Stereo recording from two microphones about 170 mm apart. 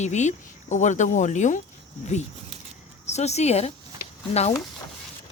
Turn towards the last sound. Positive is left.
turn(degrees=40)  # may be behind; listen again after turning